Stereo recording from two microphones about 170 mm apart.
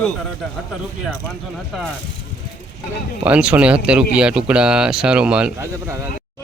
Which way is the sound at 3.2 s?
5° right (ahead or behind).